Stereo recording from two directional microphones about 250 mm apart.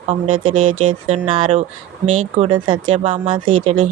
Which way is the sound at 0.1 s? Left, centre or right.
Right.